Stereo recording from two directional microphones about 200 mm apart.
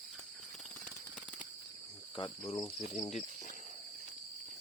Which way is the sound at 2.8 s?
35° left (ahead or behind).